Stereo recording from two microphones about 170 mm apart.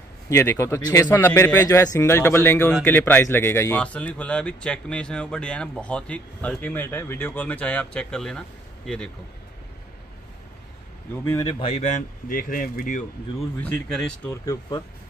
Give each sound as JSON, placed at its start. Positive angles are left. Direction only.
{"t": 0.3, "sound": "speech", "side_deg": 15}
{"t": 11.4, "sound": "a man's voice", "side_deg": 35}
{"t": 13.8, "sound": "speech", "side_deg": 5}
{"t": 14.3, "sound": "speech", "side_deg": 20}